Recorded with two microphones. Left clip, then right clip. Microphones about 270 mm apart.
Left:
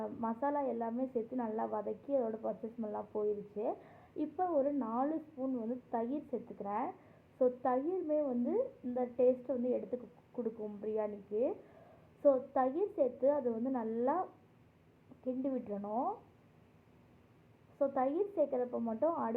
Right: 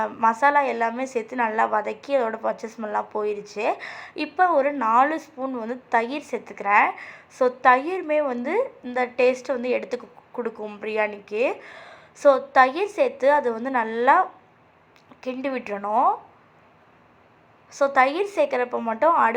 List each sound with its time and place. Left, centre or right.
0.0 s a woman's voice: right
15.3 s a woman's voice: right
17.7 s a woman's voice: right